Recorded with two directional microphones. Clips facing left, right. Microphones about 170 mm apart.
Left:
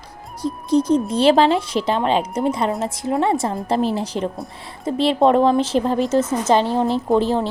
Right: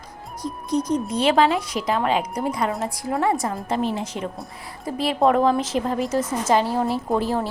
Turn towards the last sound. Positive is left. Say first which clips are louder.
# left 5 dB
turn(degrees=25)  # may be behind; listen again after turning